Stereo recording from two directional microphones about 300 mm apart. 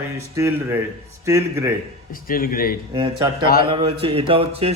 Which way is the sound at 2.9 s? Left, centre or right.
Centre.